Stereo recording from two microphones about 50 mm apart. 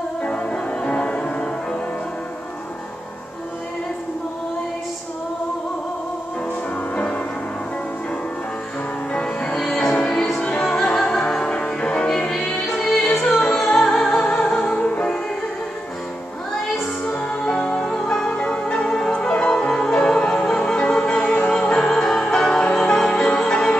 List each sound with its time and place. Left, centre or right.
0.2 s music: left
7.0 s music: left
9.1 s music: centre
9.7 s music: centre
11.0 s music: centre
11.2 s music: centre
12.6 s music: centre
14.8 s music: left
17.0 s music: left
18.3 s music: left